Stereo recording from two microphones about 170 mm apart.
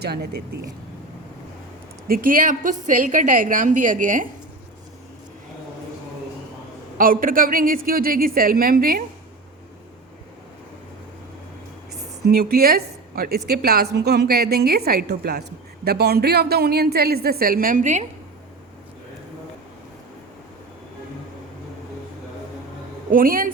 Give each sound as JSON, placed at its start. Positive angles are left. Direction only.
{"t": 0.0, "sound": "speech", "side_deg": -70}
{"t": 2.0, "sound": "a woman's voice", "side_deg": -55}
{"t": 7.0, "sound": "a woman's voice", "side_deg": -55}
{"t": 12.2, "sound": "a woman's voice", "side_deg": -65}
{"t": 23.1, "sound": "a woman's voice", "side_deg": -55}